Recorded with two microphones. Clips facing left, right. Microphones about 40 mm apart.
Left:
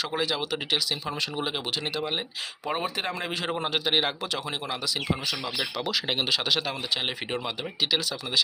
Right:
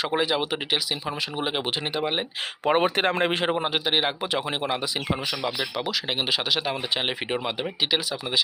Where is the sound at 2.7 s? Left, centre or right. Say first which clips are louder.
Right 8 dB; right.